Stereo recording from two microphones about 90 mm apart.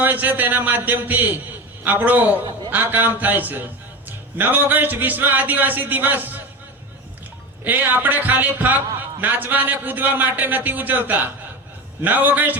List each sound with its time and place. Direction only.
0.0 s a man's voice: 20° right (ahead or behind)
7.6 s a man's voice: 20° right (ahead or behind)